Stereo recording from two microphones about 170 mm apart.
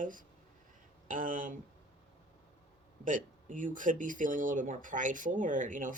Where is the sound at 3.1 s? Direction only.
50° right (ahead or behind).